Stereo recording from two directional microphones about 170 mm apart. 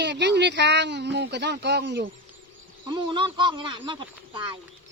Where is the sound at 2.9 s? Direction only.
30° right (ahead or behind).